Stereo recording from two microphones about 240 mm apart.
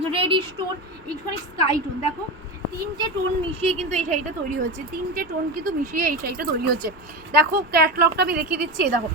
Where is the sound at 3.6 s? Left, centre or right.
Right.